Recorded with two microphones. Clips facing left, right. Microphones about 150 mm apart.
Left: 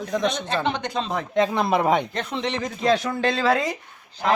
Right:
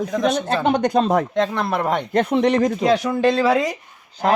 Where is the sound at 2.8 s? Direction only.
10° right (ahead or behind).